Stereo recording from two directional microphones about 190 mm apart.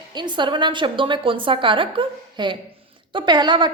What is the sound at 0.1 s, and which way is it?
A woman's voice, 25° right (ahead or behind).